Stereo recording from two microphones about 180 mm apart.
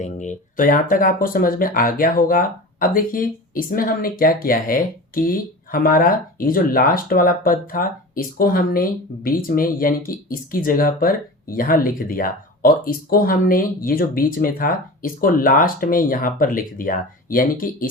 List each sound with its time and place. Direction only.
0.0 s speech: 45° left (ahead or behind)